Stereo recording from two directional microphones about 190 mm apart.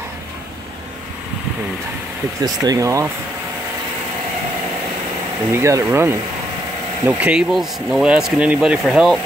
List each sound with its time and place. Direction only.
2.4 s speech: 20° right (ahead or behind)
5.5 s speech: 15° right (ahead or behind)